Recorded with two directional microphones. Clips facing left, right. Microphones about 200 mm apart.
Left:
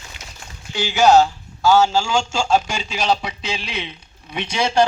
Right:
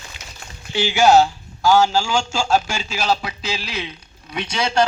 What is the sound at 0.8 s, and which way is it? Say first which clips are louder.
A man's voice: even; 10° right (ahead or behind).